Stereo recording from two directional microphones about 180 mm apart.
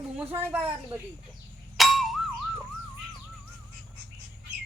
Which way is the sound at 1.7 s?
Centre (ahead or behind).